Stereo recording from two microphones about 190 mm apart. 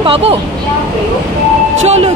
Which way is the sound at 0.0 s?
30° right (ahead or behind).